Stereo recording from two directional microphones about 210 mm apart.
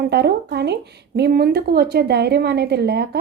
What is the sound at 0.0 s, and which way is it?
Speech, 50° right (ahead or behind).